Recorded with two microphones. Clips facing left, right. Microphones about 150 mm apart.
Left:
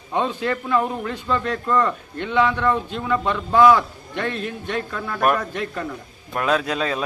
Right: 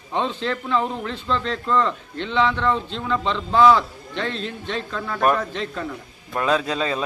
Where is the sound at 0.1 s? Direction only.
10° left (ahead or behind).